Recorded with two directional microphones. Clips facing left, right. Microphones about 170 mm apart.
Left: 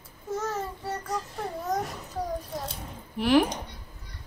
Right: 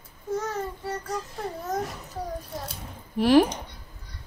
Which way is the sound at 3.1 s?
35° right (ahead or behind).